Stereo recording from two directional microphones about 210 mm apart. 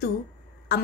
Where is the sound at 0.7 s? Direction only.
50° left (ahead or behind).